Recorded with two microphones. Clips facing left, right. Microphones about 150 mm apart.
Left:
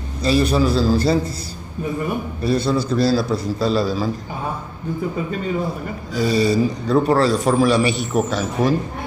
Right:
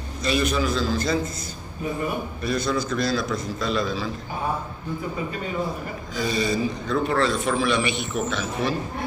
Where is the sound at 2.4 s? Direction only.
30° left (ahead or behind).